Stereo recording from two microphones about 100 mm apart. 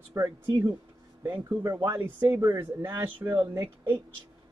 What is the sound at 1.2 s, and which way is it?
Speech, 25° right (ahead or behind).